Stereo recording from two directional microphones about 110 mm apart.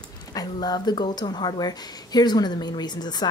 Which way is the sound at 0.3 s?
35° left (ahead or behind).